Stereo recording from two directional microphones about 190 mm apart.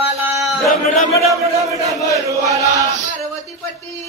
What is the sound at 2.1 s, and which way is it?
Chant, 15° right (ahead or behind).